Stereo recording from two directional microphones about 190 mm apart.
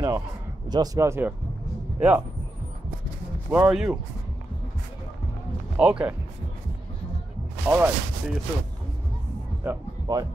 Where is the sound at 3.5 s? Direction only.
5° right (ahead or behind).